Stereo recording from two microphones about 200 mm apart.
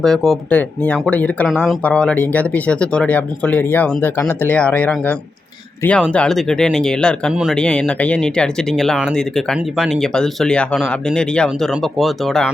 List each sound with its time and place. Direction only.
0.0 s speech: centre (ahead or behind)